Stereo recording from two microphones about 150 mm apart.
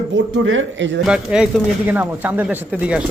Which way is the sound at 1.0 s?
5° right (ahead or behind).